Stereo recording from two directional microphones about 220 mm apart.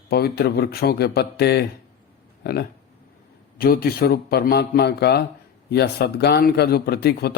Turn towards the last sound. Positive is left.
turn(degrees=45)  # may be behind; listen again after turning